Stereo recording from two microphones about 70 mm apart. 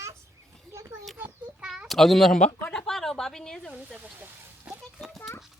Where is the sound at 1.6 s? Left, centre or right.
Centre.